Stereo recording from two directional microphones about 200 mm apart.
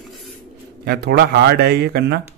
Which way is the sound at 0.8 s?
55° right (ahead or behind).